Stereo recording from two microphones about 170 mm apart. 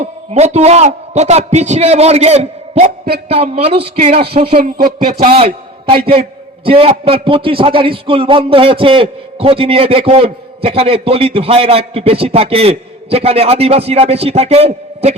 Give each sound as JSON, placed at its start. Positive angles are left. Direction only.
{"t": 0.0, "sound": "a man's voice", "side_deg": -40}
{"t": 4.4, "sound": "speech", "side_deg": -60}
{"t": 5.9, "sound": "a man's voice", "side_deg": -30}